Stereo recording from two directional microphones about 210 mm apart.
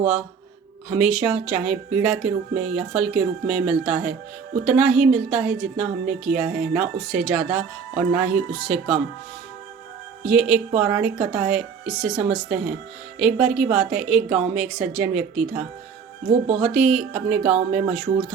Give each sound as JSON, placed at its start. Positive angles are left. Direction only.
{"t": 0.0, "sound": "a woman's voice", "side_deg": -5}
{"t": 10.2, "sound": "a woman's voice", "side_deg": -5}